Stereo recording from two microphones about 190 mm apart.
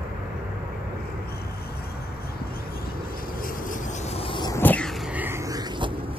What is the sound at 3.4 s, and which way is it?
Insect, 45° left (ahead or behind).